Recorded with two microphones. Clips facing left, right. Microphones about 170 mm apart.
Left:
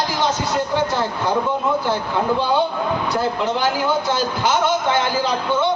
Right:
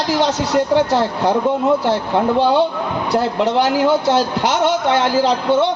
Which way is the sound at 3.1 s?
75° right (ahead or behind).